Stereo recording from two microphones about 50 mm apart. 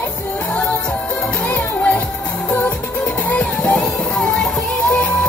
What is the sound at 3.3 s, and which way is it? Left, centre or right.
Music, left.